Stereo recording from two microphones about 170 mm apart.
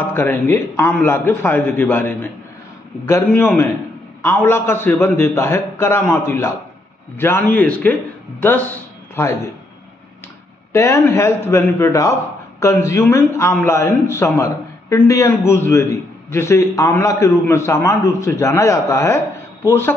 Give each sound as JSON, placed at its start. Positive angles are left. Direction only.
{"t": 0.1, "sound": "a man's voice", "side_deg": 15}
{"t": 10.7, "sound": "a man's voice", "side_deg": 15}